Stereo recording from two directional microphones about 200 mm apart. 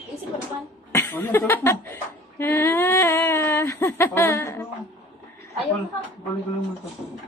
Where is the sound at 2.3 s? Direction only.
10° left (ahead or behind).